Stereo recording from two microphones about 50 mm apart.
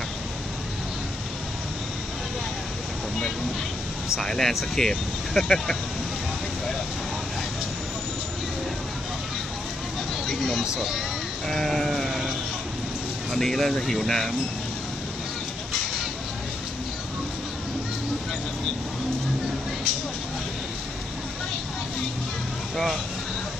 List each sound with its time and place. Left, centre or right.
4.2 s speech: centre
10.2 s a sound: centre
10.8 s speech: centre
11.4 s sheep: centre
13.3 s speech: centre